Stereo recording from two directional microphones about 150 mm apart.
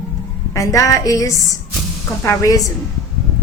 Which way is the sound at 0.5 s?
20° left (ahead or behind).